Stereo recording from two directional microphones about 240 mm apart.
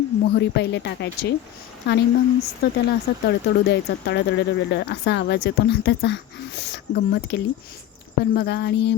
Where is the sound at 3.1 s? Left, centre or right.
Left.